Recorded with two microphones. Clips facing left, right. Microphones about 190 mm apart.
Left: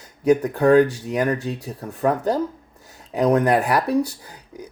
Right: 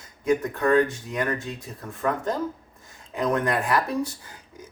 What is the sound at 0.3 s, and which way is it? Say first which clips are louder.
Speech: left 6 dB; 35° left (ahead or behind).